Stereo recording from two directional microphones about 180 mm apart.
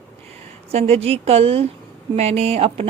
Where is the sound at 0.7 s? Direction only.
35° right (ahead or behind).